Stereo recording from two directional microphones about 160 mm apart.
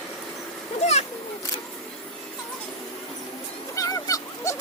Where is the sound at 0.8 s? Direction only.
45° left (ahead or behind).